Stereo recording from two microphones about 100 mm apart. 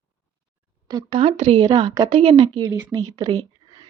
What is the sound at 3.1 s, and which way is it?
Speech, 40° right (ahead or behind).